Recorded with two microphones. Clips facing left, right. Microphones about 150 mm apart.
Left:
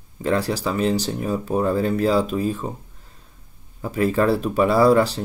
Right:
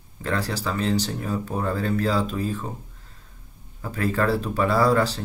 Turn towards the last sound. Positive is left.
turn(degrees=15)  # may be behind; listen again after turning